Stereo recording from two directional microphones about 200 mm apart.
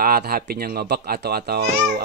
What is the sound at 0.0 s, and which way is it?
Speech, 50° right (ahead or behind).